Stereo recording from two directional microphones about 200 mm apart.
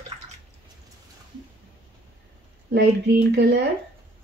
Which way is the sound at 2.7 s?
55° right (ahead or behind).